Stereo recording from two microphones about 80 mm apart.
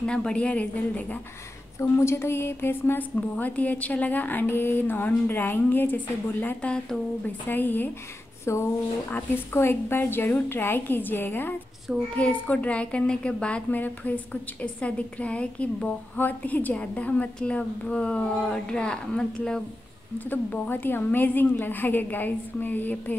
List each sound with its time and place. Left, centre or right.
0.0 s a woman's voice: centre
1.8 s a woman's voice: left
8.5 s a woman's voice: left; by 13.7 s centre
13.7 s a woman's voice: left
20.2 s a woman's voice: left